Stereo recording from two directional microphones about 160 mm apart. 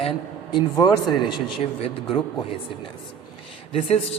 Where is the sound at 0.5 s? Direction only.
25° left (ahead or behind).